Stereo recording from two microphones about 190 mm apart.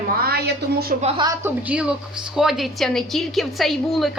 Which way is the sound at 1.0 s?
35° right (ahead or behind).